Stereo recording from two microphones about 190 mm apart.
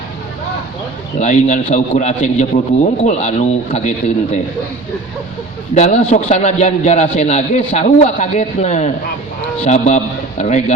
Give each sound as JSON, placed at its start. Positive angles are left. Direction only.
{"t": 1.2, "sound": "a man's voice", "side_deg": 40}
{"t": 5.7, "sound": "a man's voice", "side_deg": 35}